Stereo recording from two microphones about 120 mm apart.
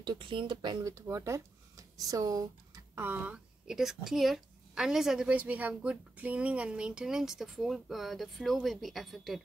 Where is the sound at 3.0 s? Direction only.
15° right (ahead or behind).